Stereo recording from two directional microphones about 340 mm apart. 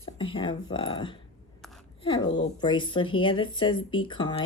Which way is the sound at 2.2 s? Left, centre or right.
Left.